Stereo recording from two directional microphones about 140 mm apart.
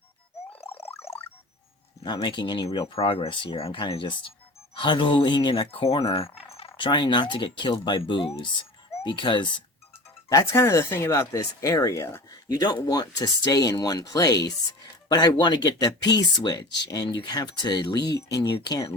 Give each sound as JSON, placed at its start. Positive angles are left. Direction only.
{"t": 2.0, "sound": "speech", "side_deg": 35}
{"t": 10.2, "sound": "speech", "side_deg": 20}